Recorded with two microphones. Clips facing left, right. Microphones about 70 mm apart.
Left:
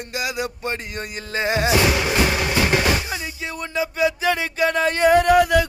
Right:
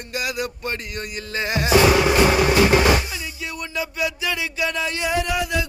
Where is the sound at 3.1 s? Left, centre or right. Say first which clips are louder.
Left 3 dB; left.